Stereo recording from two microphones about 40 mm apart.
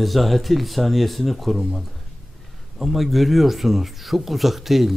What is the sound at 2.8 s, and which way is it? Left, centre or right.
Speech, centre.